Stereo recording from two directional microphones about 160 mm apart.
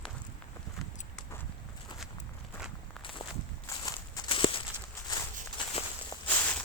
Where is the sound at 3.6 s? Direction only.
20° left (ahead or behind).